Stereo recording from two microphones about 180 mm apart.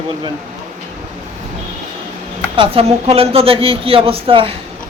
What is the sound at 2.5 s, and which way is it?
Speech, 30° right (ahead or behind).